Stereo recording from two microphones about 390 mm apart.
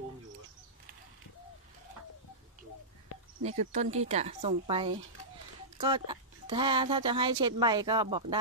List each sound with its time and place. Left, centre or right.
3.4 s speech: centre